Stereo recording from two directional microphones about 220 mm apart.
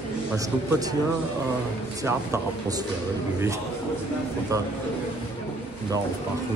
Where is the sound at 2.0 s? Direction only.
15° right (ahead or behind).